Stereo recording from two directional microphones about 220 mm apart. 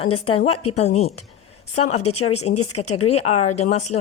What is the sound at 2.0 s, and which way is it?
Speech, 90° left.